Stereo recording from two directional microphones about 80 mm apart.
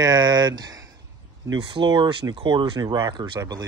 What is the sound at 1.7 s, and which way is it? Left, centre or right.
Speech, right.